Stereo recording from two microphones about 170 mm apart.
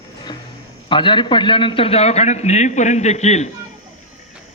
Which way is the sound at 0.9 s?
30° left (ahead or behind).